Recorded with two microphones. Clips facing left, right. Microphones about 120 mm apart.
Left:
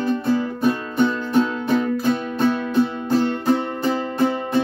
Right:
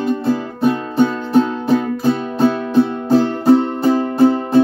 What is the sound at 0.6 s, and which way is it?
Music, 35° right (ahead or behind).